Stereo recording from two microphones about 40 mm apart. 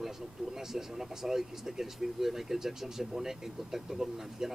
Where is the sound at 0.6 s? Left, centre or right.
Centre.